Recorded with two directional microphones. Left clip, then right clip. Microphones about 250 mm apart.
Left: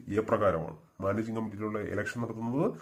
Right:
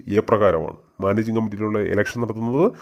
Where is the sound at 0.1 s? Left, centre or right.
Right.